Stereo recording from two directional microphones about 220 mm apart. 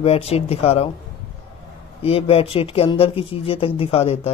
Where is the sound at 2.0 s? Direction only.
25° left (ahead or behind).